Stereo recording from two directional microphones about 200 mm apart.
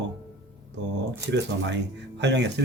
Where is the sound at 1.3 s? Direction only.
60° right (ahead or behind).